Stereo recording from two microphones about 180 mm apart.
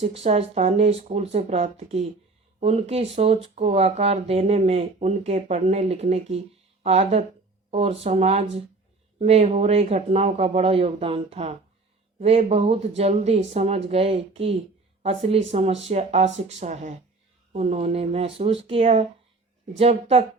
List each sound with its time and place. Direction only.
0.0 s speech: 35° right (ahead or behind)